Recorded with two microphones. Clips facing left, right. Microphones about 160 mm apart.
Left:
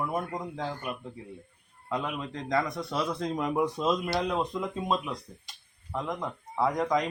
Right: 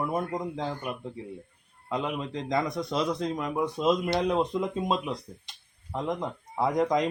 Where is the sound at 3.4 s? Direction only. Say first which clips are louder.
Left 3 dB; 10° left (ahead or behind).